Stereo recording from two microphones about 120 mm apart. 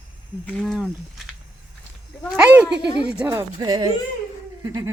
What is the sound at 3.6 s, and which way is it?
Speech, 40° right (ahead or behind).